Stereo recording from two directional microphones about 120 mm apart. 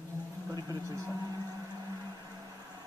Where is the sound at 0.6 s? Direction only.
30° right (ahead or behind).